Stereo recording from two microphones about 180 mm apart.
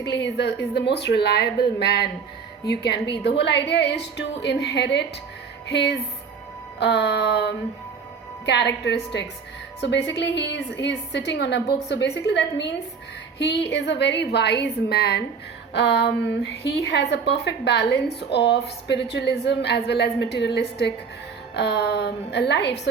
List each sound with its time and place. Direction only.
0.1 s a woman's voice: 70° left (ahead or behind)